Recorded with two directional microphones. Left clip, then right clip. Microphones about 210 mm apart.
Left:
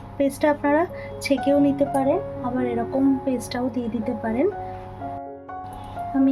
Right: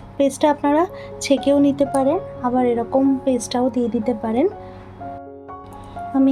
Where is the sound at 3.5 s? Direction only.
25° right (ahead or behind).